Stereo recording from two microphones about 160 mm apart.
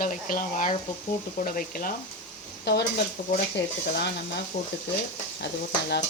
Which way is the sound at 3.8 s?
90° left.